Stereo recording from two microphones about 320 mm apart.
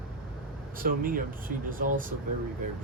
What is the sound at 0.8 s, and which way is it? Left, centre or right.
Speech, right.